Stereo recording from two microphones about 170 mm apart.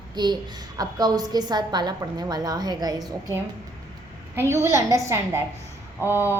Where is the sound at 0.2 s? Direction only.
25° right (ahead or behind).